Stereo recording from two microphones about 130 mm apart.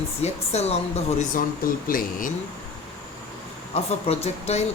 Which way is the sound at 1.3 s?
90° left.